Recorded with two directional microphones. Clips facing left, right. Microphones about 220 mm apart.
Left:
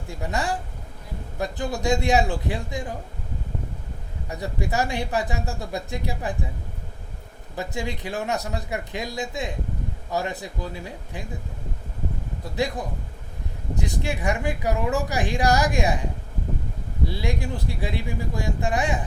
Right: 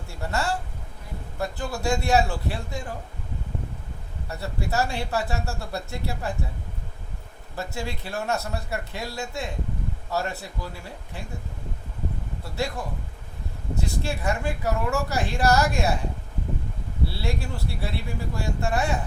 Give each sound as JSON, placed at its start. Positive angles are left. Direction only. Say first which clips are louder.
{"t": 0.1, "sound": "speech", "louder": "left 1 dB", "side_deg": 15}
{"t": 4.3, "sound": "speech", "louder": "left 2 dB", "side_deg": 15}
{"t": 7.5, "sound": "speech", "louder": "left 2 dB", "side_deg": 15}
{"t": 12.5, "sound": "speech", "louder": "left 3 dB", "side_deg": 15}
{"t": 17.1, "sound": "speech", "louder": "left 5 dB", "side_deg": 15}